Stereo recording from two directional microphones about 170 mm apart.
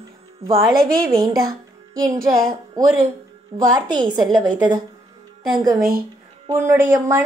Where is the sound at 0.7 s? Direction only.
60° right (ahead or behind).